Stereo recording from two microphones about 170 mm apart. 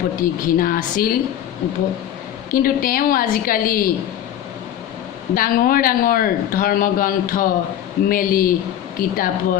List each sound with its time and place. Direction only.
0.2 s speech: 55° left (ahead or behind)
2.5 s speech: 55° left (ahead or behind)
5.3 s speech: 55° left (ahead or behind)